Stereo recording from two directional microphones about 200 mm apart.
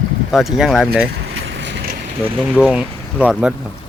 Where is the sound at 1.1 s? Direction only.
65° right (ahead or behind).